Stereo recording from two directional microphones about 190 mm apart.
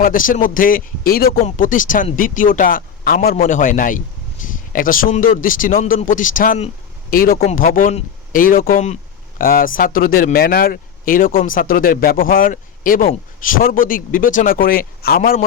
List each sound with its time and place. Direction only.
0.0 s speech: 45° left (ahead or behind)